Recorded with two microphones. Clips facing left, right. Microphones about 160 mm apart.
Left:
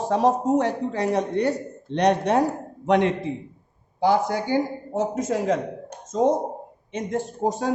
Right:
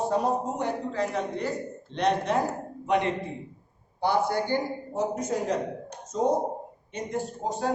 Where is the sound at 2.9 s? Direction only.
90° left.